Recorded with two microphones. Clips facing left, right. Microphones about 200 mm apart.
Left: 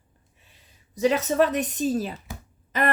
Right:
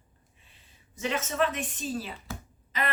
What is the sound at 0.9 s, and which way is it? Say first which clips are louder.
A woman's voice: left 9 dB; 40° left (ahead or behind).